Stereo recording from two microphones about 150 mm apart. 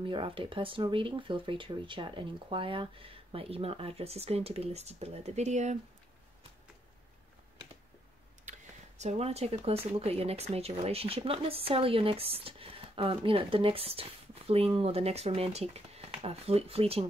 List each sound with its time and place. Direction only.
0.0 s speech: 35° right (ahead or behind); by 5.8 s 50° right (ahead or behind)
8.5 s a sound: 50° right (ahead or behind)
9.9 s speech: 40° right (ahead or behind)